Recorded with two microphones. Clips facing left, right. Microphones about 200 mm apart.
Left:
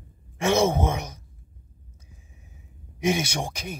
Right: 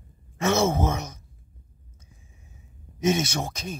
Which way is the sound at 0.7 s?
30° left (ahead or behind).